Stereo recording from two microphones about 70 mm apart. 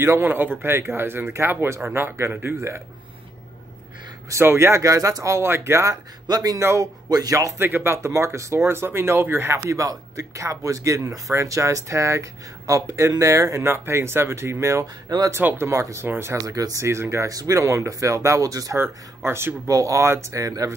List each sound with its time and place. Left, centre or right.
0.2 s speech: right
4.3 s speech: right
6.2 s speech: right
6.6 s speech: right
7.1 s speech: right
7.5 s speech: right
13.7 s speech: right
15.0 s speech: right
15.4 s speech: right
16.4 s speech: right
16.8 s speech: right
18.8 s speech: right
19.7 s speech: right